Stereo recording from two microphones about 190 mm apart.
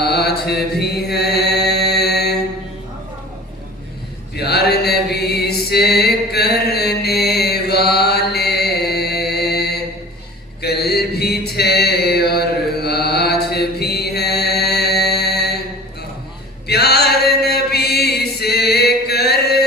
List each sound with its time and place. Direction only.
0.0 s chant: 55° left (ahead or behind)
4.4 s mantra: 55° left (ahead or behind)
16.6 s chant: 55° left (ahead or behind)